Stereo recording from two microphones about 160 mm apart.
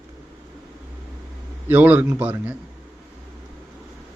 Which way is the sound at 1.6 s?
10° right (ahead or behind).